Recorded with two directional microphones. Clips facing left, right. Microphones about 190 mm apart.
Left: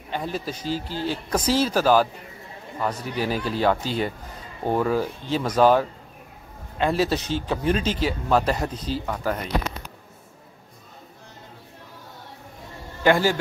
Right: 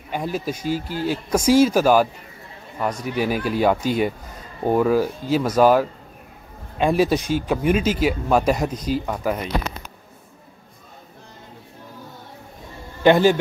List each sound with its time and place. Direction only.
0.1 s speech: 10° right (ahead or behind)
13.0 s a man's voice: 20° right (ahead or behind)